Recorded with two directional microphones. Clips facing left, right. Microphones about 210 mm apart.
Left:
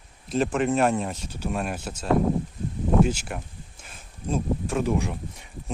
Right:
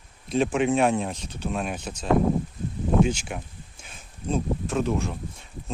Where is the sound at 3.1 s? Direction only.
5° left (ahead or behind).